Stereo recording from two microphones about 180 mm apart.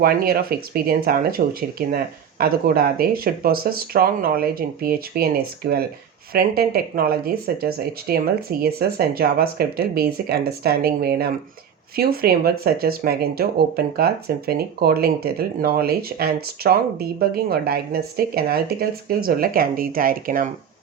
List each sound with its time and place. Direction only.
0.0 s speech: 55° right (ahead or behind)
2.4 s speech: 55° right (ahead or behind)